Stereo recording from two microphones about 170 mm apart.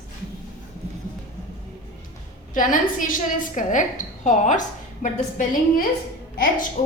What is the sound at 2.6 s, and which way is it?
A woman's voice, 55° left (ahead or behind).